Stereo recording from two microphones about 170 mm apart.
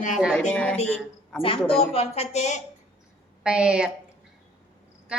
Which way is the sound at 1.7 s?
35° left (ahead or behind).